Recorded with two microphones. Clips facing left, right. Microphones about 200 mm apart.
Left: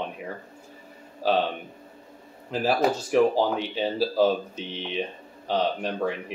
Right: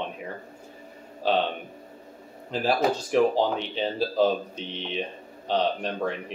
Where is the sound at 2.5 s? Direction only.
5° left (ahead or behind).